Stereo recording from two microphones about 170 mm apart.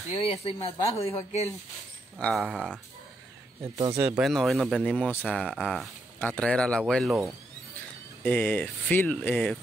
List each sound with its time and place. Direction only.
0.1 s speech: 35° left (ahead or behind)
2.1 s speech: 5° left (ahead or behind)
3.6 s speech: 20° right (ahead or behind)
4.2 s speech: centre (ahead or behind)
8.2 s speech: 10° left (ahead or behind)